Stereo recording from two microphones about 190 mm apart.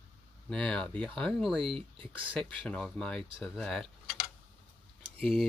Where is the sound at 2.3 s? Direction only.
5° left (ahead or behind).